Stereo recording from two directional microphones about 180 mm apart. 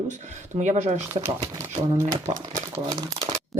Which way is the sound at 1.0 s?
15° right (ahead or behind).